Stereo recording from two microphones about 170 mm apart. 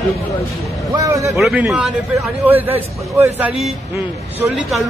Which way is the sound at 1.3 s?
5° right (ahead or behind).